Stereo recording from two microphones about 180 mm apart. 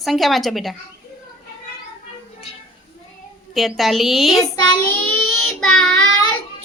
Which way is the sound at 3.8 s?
Centre (ahead or behind).